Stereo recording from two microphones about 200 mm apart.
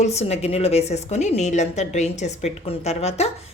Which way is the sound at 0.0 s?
35° left (ahead or behind).